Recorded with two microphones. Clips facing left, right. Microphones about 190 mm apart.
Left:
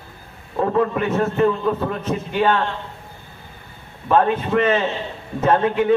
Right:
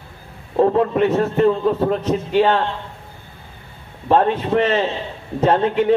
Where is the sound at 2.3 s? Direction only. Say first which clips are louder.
Right 3 dB; 30° right (ahead or behind).